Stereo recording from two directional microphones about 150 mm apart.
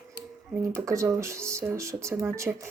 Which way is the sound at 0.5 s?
20° right (ahead or behind).